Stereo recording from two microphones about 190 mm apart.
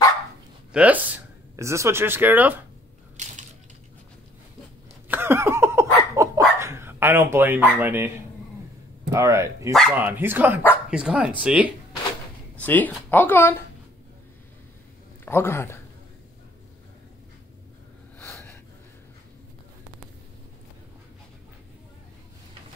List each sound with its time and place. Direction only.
0.7 s speech: 10° right (ahead or behind)
3.2 s crushing: 40° right (ahead or behind)
5.0 s a sound: 10° right (ahead or behind)
9.1 s speech: 15° right (ahead or behind)
12.5 s speech: 10° left (ahead or behind)
15.2 s speech: 15° left (ahead or behind)
18.2 s snort: 10° left (ahead or behind)